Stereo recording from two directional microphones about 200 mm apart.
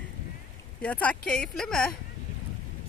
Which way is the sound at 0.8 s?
5° left (ahead or behind).